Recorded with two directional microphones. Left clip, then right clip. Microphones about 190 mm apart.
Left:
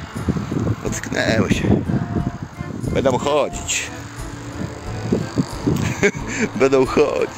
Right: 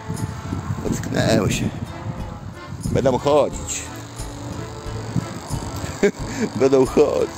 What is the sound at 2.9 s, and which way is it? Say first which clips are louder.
Speech: left 1 dB; 15° right (ahead or behind).